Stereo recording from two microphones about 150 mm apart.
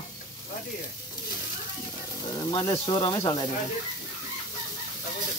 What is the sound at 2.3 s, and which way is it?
Speech, 30° left (ahead or behind).